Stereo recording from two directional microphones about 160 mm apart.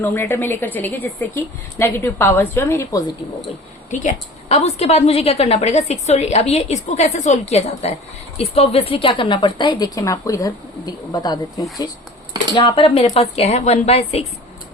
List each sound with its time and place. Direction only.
0.0 s a woman's voice: 15° left (ahead or behind)
3.9 s a woman's voice: 45° left (ahead or behind)